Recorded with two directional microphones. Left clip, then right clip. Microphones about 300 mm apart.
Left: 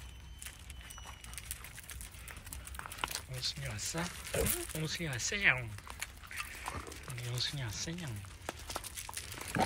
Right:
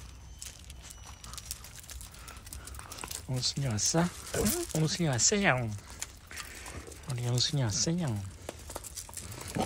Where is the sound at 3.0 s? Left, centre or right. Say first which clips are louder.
Right 3 dB; centre.